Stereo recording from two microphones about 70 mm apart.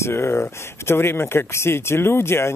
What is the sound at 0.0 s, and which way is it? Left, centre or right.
Speech, left.